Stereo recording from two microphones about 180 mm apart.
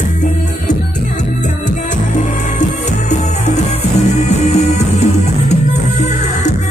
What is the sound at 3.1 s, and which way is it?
Music, 40° left (ahead or behind).